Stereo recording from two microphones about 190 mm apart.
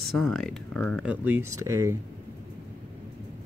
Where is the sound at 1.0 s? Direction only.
10° right (ahead or behind).